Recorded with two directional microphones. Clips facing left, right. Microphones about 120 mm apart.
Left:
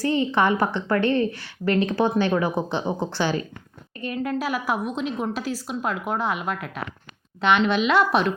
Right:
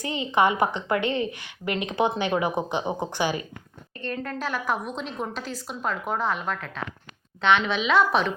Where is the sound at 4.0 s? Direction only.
10° left (ahead or behind).